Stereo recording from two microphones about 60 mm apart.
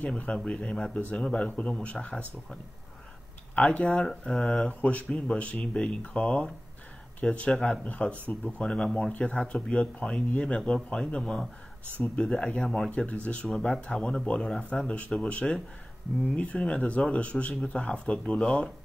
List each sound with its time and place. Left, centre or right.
0.0 s speech: left
3.5 s speech: left
3.8 s speech: centre
4.6 s speech: left
7.5 s speech: centre
7.8 s speech: left; by 12.9 s centre
12.9 s speech: left
18.4 s speech: centre